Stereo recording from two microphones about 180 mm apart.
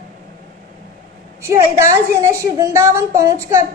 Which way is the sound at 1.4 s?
15° right (ahead or behind).